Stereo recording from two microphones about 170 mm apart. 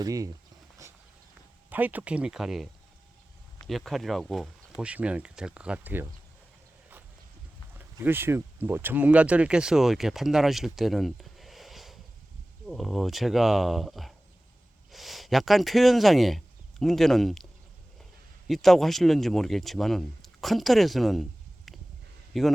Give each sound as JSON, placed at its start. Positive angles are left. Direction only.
{"t": 0.0, "sound": "speech", "side_deg": -20}
{"t": 0.8, "sound": "a sound", "side_deg": -15}
{"t": 1.7, "sound": "speech", "side_deg": -10}
{"t": 3.7, "sound": "speech", "side_deg": 0}
{"t": 7.8, "sound": "speech", "side_deg": -10}
{"t": 18.4, "sound": "speech", "side_deg": 0}
{"t": 22.3, "sound": "a man's voice", "side_deg": 0}